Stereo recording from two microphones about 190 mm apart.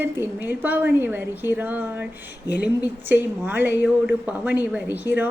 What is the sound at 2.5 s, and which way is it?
Speech, 60° left (ahead or behind).